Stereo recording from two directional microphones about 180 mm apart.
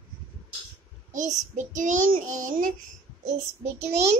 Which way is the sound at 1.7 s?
45° right (ahead or behind).